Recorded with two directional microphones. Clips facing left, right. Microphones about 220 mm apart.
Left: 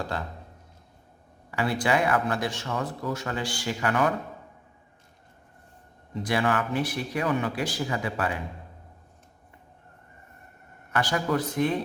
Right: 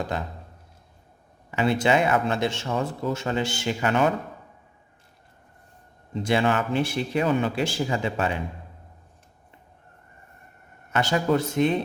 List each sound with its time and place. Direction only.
0.0 s speech: 20° right (ahead or behind)
1.5 s speech: 25° right (ahead or behind)
6.1 s speech: 25° right (ahead or behind)
10.9 s speech: 25° right (ahead or behind)